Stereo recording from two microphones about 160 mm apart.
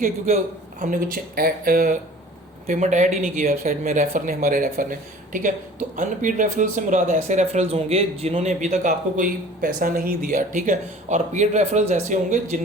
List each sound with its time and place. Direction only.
0.8 s speech: 60° right (ahead or behind)
2.6 s speech: 50° right (ahead or behind)